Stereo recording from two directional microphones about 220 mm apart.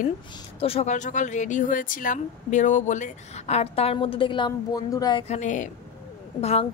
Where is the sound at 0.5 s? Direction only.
25° left (ahead or behind).